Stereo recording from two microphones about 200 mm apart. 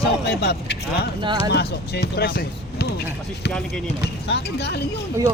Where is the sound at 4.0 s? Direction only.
55° left (ahead or behind).